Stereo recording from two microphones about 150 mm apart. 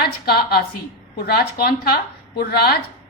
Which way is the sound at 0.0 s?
90° left.